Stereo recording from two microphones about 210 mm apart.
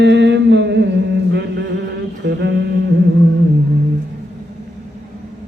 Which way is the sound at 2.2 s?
55° right (ahead or behind).